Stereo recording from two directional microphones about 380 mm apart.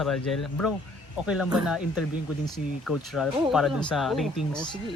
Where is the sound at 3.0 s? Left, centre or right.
Centre.